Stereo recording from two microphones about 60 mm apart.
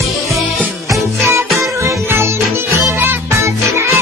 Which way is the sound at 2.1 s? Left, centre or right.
Right.